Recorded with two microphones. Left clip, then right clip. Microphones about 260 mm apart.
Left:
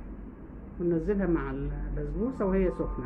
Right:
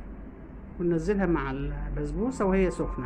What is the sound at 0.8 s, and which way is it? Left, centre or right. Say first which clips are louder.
Speech: right 2 dB; right.